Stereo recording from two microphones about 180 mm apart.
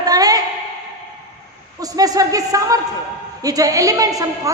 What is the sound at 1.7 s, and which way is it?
A woman's voice, 20° right (ahead or behind).